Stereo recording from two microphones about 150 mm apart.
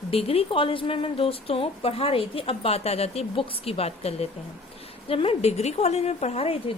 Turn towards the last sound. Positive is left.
turn(degrees=40)  # may be behind; listen again after turning